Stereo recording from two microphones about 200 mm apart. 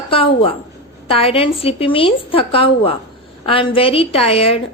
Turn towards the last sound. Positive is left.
turn(degrees=30)  # may be behind; listen again after turning